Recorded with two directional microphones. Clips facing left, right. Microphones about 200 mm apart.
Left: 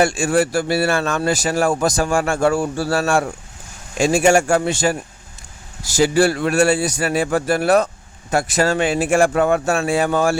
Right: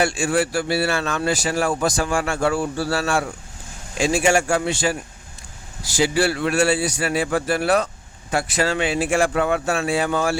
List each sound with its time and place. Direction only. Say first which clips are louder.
0.0 s speech: left 4 dB; 45° left (ahead or behind)